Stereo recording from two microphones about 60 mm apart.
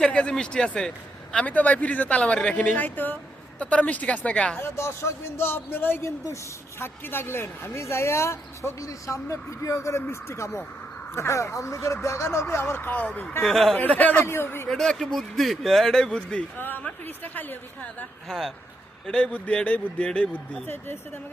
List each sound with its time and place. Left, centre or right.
0.0 s a man's voice: centre
2.7 s a woman's voice: left
4.5 s a woman's voice: left
6.1 s a woman's voice: left
11.3 s a woman's voice: left
13.4 s speech: centre
13.7 s speech: left
14.3 s a woman's voice: left
14.7 s speech: centre
16.0 s a man's voice: centre
16.6 s a woman's voice: left
18.3 s a man's voice: centre
20.7 s a woman's voice: left